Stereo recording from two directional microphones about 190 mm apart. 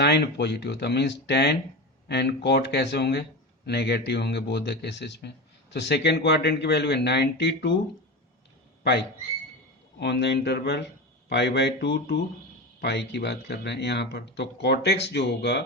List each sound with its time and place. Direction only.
0.0 s speech: 60° left (ahead or behind)
8.8 s speech: 60° left (ahead or behind)